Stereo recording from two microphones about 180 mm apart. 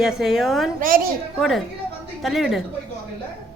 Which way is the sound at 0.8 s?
50° right (ahead or behind).